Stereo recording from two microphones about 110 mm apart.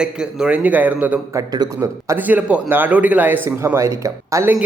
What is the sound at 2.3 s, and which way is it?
Speech, 10° right (ahead or behind).